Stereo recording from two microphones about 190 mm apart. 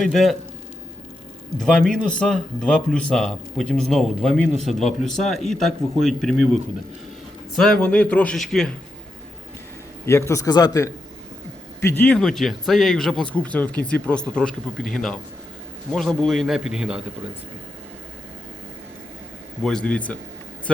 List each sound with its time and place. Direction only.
0.0 s a man's voice: centre (ahead or behind)
1.5 s a man's voice: 5° left (ahead or behind)
7.5 s a man's voice: 5° left (ahead or behind)
10.1 s a man's voice: 15° left (ahead or behind); by 17.0 s 5° right (ahead or behind)
19.6 s a man's voice: 5° left (ahead or behind)